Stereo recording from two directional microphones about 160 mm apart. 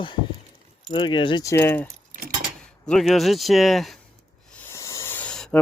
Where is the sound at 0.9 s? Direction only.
30° left (ahead or behind).